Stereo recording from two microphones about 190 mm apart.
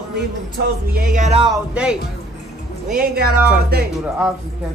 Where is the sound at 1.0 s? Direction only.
45° right (ahead or behind).